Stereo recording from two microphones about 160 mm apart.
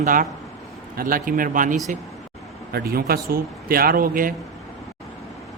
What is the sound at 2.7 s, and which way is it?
A man's voice, 75° right (ahead or behind).